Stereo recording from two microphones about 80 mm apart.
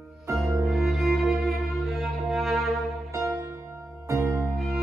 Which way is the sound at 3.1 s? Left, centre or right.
Right.